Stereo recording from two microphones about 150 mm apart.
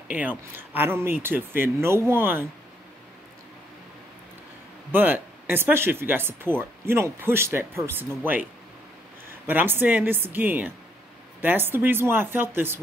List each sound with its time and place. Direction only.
0.6 s speech: 15° right (ahead or behind)
4.9 s speech: 15° right (ahead or behind)
9.5 s speech: 15° right (ahead or behind)